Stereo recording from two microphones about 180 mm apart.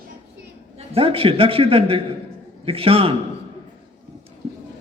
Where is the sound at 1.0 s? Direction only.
30° right (ahead or behind).